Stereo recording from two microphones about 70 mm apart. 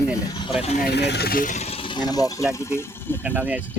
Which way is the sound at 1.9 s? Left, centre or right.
Left.